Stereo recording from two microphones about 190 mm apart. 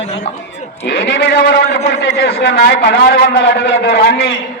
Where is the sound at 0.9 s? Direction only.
65° left (ahead or behind).